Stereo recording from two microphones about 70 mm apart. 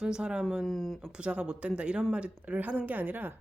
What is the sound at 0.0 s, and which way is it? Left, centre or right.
Speech, centre.